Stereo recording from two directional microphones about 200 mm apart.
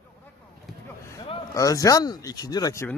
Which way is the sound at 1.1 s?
20° left (ahead or behind).